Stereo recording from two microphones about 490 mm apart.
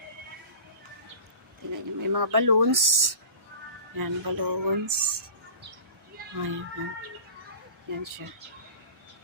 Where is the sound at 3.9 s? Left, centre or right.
Right.